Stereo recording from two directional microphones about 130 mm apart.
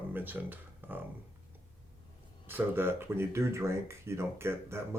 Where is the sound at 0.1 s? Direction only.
15° right (ahead or behind).